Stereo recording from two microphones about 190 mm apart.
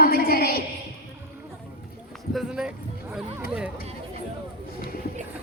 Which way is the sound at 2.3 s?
5° right (ahead or behind).